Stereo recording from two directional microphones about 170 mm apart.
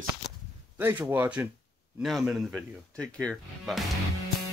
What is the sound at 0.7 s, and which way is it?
Speech, 10° right (ahead or behind).